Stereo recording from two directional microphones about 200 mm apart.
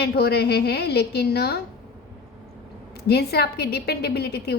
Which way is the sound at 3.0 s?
55° left (ahead or behind).